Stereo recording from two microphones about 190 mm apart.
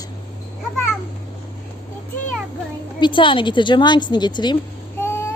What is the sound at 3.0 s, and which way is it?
A woman's voice, 25° left (ahead or behind).